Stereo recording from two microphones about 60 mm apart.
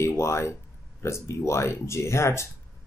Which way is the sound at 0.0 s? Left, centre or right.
Left.